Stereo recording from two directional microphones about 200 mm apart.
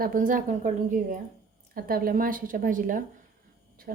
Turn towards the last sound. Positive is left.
turn(degrees=-40)  # may be behind; listen again after turning